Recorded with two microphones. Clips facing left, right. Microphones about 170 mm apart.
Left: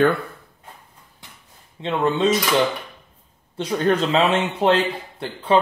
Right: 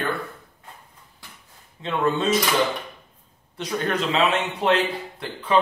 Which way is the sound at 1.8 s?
25° left (ahead or behind).